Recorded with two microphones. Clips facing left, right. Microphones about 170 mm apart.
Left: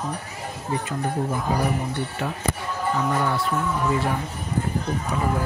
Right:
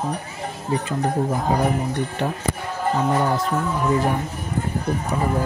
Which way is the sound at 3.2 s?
40° right (ahead or behind).